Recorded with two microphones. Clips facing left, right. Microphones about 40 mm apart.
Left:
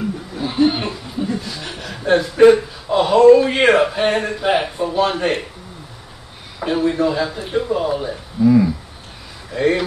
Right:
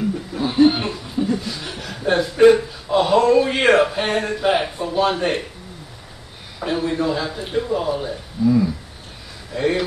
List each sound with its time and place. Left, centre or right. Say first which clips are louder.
0.4 s chuckle: right 2 dB; centre
1.2 s chuckle: right 2 dB; centre
1.5 s a man's voice: left 1 dB; centre
6.6 s a man's voice: left 4 dB; centre
9.6 s a man's voice: left 3 dB; centre